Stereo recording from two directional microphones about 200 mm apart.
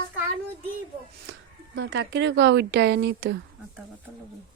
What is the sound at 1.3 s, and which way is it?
Speech, 65° right (ahead or behind).